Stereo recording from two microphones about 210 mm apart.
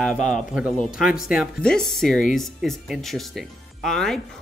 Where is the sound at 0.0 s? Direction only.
Centre (ahead or behind).